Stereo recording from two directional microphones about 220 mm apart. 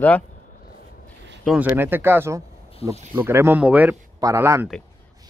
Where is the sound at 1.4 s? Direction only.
Centre (ahead or behind).